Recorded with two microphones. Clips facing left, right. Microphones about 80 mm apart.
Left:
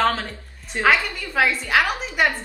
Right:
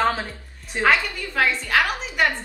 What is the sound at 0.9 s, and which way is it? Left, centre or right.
A woman's voice, centre.